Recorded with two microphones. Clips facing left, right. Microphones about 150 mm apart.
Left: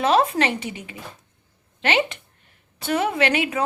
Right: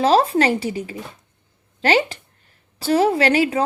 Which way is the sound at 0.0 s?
35° right (ahead or behind).